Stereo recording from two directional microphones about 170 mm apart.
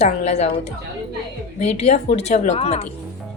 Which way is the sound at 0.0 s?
40° left (ahead or behind).